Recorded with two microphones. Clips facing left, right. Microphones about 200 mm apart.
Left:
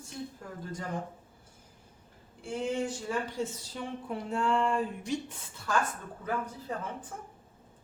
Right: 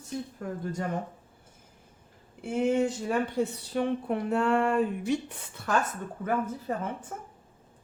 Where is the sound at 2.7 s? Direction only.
60° right (ahead or behind).